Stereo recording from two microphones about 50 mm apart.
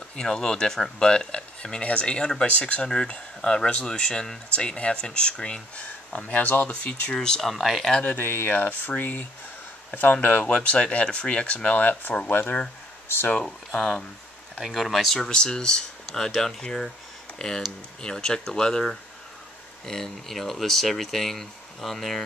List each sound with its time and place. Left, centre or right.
0.1 s speech: centre
6.1 s speech: left
7.2 s speech: centre
8.2 s speech: left
8.5 s speech: left
10.2 s speech: left
13.4 s speech: centre
15.2 s speech: centre
17.4 s speech: centre
19.9 s speech: centre